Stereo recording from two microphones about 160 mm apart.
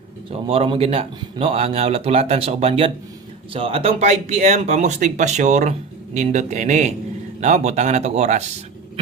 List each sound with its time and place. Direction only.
0.3 s speech: 35° right (ahead or behind)